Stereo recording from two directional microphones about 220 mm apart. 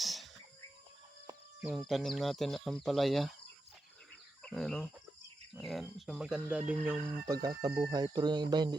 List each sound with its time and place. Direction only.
0.0 s a sound: centre (ahead or behind)
1.6 s speech: centre (ahead or behind)
4.4 s speech: 5° left (ahead or behind); by 8.7 s 20° right (ahead or behind)